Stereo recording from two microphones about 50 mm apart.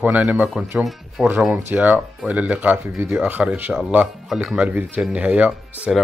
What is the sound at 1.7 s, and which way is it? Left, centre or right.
Speech, right.